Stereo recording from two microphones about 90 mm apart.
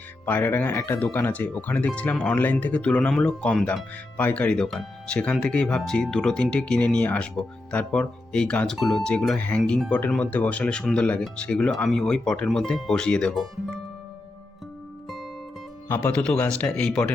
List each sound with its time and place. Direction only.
0.3 s speech: 20° left (ahead or behind)
16.1 s speech: 10° left (ahead or behind)